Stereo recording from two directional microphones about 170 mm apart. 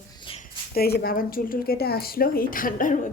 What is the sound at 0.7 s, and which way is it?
Speech, 65° left (ahead or behind).